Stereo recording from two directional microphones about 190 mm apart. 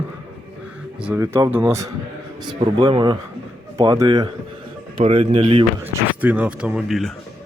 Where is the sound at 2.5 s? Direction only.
25° right (ahead or behind).